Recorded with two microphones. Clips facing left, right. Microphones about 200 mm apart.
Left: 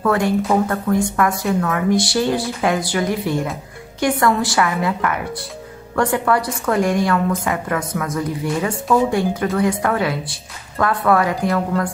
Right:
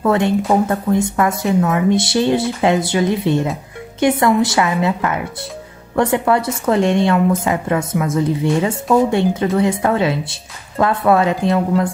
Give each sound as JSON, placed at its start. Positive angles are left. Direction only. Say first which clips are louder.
{"t": 0.0, "sound": "a woman's voice", "louder": "right 2 dB", "side_deg": -25}